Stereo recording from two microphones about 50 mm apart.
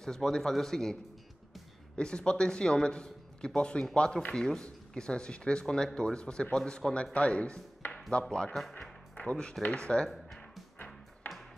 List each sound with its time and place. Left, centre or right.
0.0 s a man's voice: centre
2.0 s a man's voice: centre
10.0 s music: centre
11.3 s ping: left